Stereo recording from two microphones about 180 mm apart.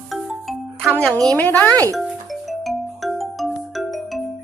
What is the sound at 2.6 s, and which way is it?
Music, centre (ahead or behind).